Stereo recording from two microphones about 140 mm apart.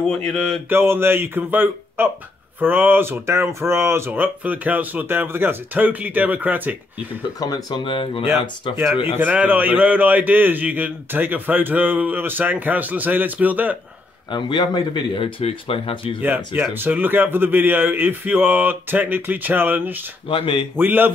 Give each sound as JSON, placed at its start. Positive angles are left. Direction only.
{"t": 0.0, "sound": "mantra", "side_deg": 5}
{"t": 0.7, "sound": "a man's voice", "side_deg": -15}
{"t": 7.3, "sound": "speech", "side_deg": 25}
{"t": 9.2, "sound": "a man's voice", "side_deg": -10}
{"t": 14.3, "sound": "speech", "side_deg": 30}
{"t": 16.2, "sound": "a man's voice", "side_deg": -15}
{"t": 20.2, "sound": "speech", "side_deg": 35}
{"t": 20.7, "sound": "a man's voice", "side_deg": -15}